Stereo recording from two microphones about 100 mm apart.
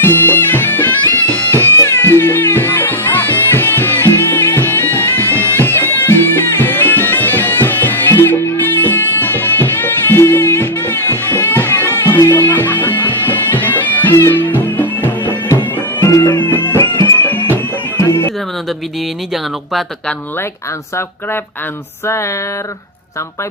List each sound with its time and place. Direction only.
0.0 s bagpipes: 20° left (ahead or behind)
1.7 s music: 25° left (ahead or behind)
16.2 s music: 50° left (ahead or behind)
16.5 s music: 20° left (ahead or behind)
22.0 s music: 30° left (ahead or behind)